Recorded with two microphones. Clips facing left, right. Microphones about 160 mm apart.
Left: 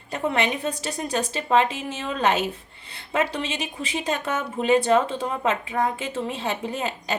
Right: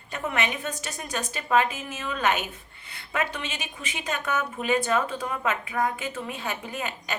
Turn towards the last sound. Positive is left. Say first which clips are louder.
# left 5 dB
turn(degrees=30)  # may be behind; listen again after turning